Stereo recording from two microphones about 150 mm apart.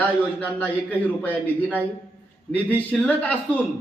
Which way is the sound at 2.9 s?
10° left (ahead or behind).